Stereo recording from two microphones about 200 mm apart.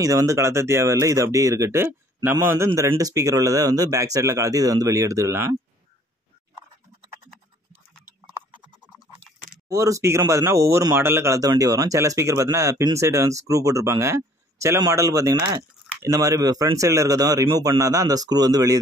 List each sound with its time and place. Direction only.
0.0 s speech: 15° right (ahead or behind)
9.7 s speech: 15° right (ahead or behind)